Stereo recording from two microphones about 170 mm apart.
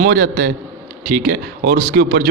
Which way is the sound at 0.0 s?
60° right (ahead or behind).